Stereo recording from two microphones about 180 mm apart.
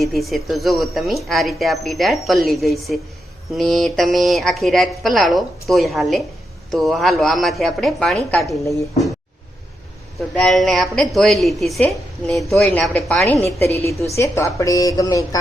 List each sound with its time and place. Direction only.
0.0 s a woman's voice: centre (ahead or behind)
10.2 s a woman's voice: centre (ahead or behind)
13.4 s a woman's voice: 15° left (ahead or behind)